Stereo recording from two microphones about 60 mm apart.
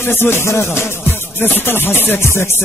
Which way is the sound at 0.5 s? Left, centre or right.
Left.